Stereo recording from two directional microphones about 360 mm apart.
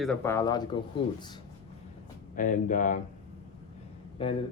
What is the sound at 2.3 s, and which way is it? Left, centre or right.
Speech, left.